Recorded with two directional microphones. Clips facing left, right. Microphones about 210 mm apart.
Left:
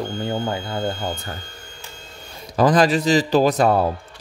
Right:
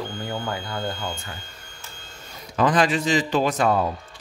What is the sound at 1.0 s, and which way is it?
Speech, 40° left (ahead or behind).